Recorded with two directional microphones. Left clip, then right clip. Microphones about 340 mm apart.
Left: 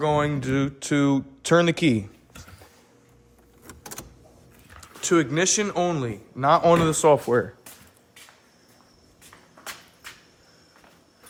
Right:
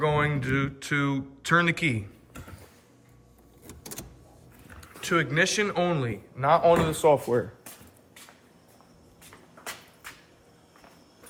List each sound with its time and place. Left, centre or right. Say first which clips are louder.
0.0 s speech: left 3 dB; centre
4.8 s speech: left 4 dB; centre
6.4 s speech: left 3 dB; left